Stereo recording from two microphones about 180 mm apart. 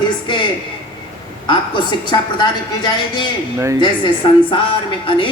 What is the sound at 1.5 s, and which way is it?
A woman's voice, 25° left (ahead or behind).